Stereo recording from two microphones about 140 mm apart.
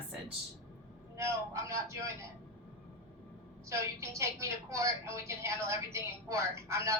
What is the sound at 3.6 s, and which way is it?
A woman's voice, 20° right (ahead or behind).